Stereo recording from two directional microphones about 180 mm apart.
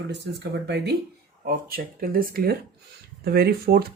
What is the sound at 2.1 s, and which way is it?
Speech, 55° right (ahead or behind).